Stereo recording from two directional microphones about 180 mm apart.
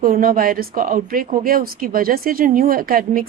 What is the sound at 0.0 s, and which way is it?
A woman's voice, 55° right (ahead or behind).